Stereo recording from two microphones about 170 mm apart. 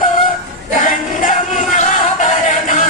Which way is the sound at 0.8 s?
50° left (ahead or behind).